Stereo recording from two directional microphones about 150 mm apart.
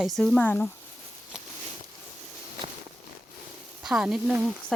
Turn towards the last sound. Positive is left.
turn(degrees=-5)  # may be behind; listen again after turning